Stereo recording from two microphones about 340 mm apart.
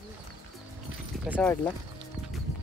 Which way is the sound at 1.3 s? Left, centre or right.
Centre.